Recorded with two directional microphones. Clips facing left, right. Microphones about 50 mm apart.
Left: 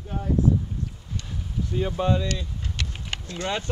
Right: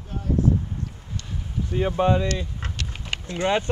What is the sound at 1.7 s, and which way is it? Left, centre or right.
Speech, right.